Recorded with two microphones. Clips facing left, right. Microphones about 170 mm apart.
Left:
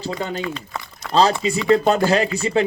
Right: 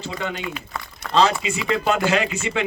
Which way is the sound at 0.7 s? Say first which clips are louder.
Left 1 dB; 20° left (ahead or behind).